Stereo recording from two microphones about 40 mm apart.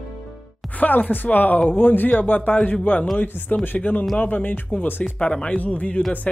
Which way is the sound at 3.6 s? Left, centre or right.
Left.